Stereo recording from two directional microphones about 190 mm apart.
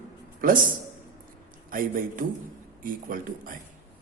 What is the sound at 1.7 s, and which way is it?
Speech, 45° right (ahead or behind).